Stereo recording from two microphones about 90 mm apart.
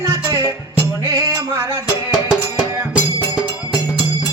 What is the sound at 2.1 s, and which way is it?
Music, 10° right (ahead or behind).